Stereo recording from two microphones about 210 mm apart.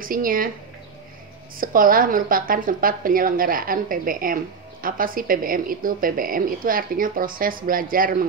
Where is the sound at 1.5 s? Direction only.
40° right (ahead or behind).